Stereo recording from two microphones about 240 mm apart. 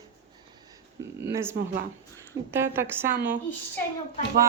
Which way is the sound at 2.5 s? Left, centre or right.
Centre.